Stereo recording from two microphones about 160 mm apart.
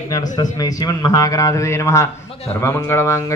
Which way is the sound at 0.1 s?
25° left (ahead or behind).